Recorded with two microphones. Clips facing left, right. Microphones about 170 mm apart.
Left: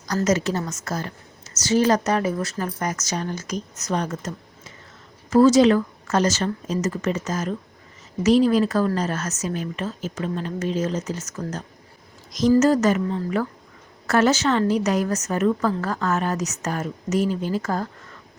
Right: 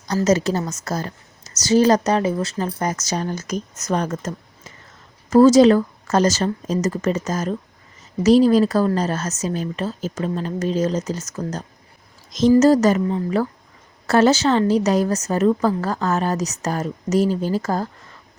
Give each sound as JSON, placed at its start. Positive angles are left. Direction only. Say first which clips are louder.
{"t": 0.3, "sound": "a woman's voice", "louder": "right 4 dB", "side_deg": -35}
{"t": 12.3, "sound": "a woman's voice", "louder": "right 4 dB", "side_deg": -25}